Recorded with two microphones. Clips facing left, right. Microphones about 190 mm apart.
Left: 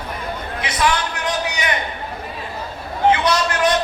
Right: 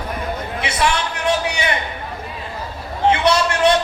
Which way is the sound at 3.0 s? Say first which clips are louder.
Right 1 dB; 30° right (ahead or behind).